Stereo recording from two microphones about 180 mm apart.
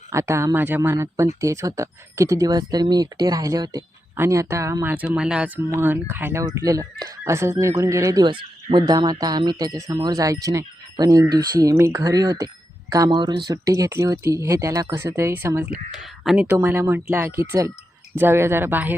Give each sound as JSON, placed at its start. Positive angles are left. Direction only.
{"t": 0.1, "sound": "speech", "side_deg": -15}